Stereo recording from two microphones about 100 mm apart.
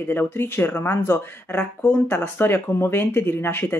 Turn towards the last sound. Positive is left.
turn(degrees=20)  # may be behind; listen again after turning